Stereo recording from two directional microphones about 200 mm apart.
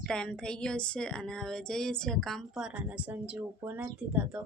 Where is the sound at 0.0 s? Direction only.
5° left (ahead or behind).